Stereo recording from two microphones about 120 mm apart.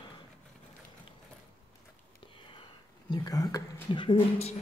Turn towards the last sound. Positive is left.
turn(degrees=45)  # may be behind; listen again after turning